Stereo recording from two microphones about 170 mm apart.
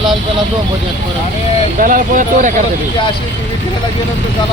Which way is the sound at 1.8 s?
50° right (ahead or behind).